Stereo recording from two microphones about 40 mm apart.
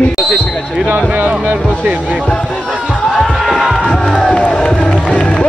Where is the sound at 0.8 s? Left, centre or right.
Right.